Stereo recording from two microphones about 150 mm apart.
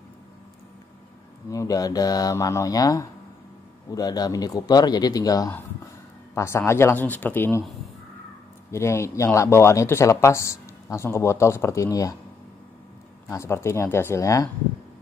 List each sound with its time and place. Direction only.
1.5 s speech: 25° left (ahead or behind)
8.7 s speech: 20° left (ahead or behind)
13.3 s speech: 20° left (ahead or behind)